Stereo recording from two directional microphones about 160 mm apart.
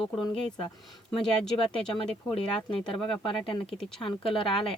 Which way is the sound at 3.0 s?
5° left (ahead or behind).